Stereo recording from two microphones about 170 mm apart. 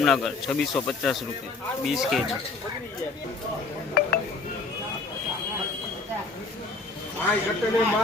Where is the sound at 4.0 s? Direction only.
70° left (ahead or behind).